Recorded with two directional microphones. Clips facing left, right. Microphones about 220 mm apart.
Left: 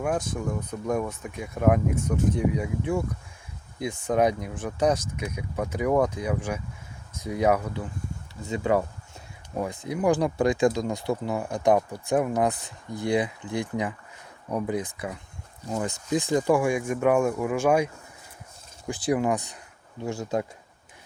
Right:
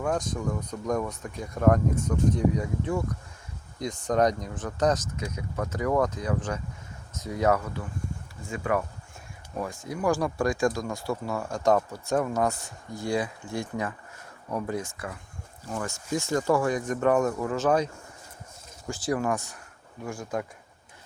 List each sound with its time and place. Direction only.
0.0 s speech: 5° left (ahead or behind)
8.4 s speech: 25° left (ahead or behind)
18.9 s speech: 15° left (ahead or behind)